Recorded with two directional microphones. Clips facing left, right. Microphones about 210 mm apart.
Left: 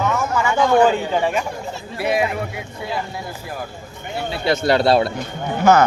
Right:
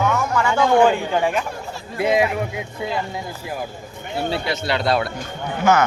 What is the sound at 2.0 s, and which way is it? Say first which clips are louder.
Speech: right 2 dB; 20° right (ahead or behind).